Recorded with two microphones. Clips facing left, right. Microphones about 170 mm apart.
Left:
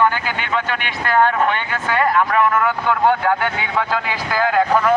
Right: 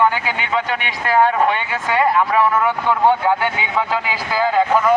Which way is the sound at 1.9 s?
20° right (ahead or behind).